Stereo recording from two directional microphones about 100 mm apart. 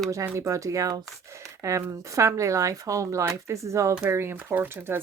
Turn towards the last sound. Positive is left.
turn(degrees=-20)  # may be behind; listen again after turning